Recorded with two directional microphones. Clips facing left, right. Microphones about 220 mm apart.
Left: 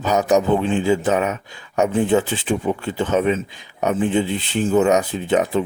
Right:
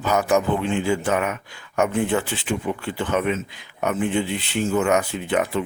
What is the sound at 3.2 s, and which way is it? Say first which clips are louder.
Speech: left 4 dB; 35° left (ahead or behind).